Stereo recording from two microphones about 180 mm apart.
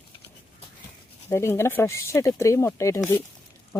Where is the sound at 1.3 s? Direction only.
15° left (ahead or behind).